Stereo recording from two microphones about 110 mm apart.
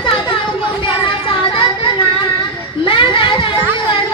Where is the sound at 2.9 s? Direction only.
50° left (ahead or behind).